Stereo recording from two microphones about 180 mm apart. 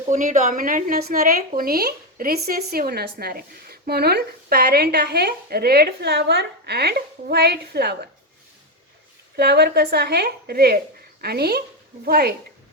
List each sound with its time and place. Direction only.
0.1 s a woman's voice: 45° right (ahead or behind); by 7.9 s 65° right (ahead or behind)
9.3 s a woman's voice: 65° right (ahead or behind)